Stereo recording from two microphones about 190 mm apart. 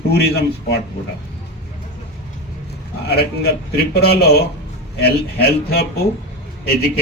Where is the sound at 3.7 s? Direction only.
55° left (ahead or behind).